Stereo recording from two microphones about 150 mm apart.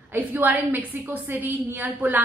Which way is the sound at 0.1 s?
10° right (ahead or behind).